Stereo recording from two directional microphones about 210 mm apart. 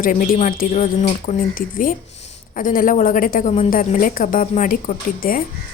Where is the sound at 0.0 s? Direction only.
40° left (ahead or behind).